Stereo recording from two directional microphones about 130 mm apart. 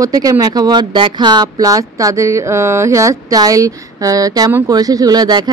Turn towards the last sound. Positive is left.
turn(degrees=-30)  # may be behind; listen again after turning